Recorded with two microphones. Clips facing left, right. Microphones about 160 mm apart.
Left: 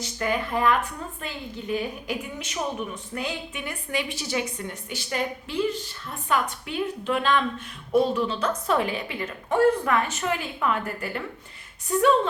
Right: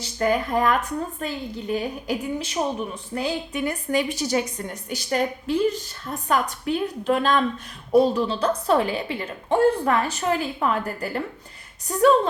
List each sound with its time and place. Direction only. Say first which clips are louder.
0.0 s a woman's voice: right 5 dB; 40° right (ahead or behind)